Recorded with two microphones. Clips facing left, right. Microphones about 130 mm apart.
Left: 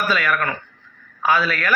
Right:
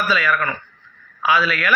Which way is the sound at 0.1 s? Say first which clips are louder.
Right 1 dB; 55° left (ahead or behind).